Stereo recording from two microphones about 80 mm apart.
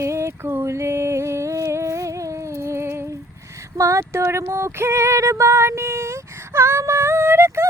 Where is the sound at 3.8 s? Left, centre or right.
Right.